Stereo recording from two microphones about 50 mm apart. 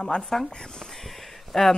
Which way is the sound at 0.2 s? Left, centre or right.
Centre.